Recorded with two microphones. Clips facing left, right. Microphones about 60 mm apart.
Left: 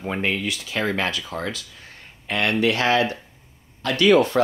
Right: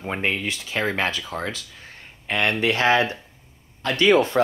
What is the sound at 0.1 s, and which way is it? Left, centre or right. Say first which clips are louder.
Speech: even; right.